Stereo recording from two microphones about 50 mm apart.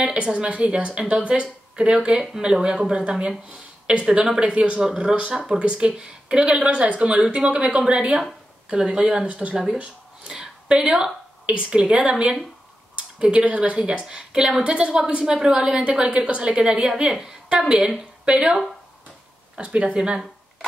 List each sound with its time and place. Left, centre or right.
0.0 s a woman's voice: centre
9.8 s a sound: centre
11.6 s a woman's voice: centre